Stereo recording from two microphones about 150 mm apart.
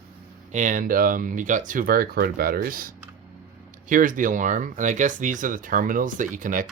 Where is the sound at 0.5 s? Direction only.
60° right (ahead or behind); by 2.9 s 75° right (ahead or behind).